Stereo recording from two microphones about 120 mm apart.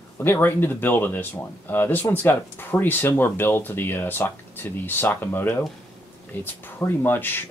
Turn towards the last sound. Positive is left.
turn(degrees=15)  # may be behind; listen again after turning